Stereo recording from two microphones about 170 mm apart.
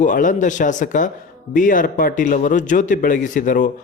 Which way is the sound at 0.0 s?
50° left (ahead or behind).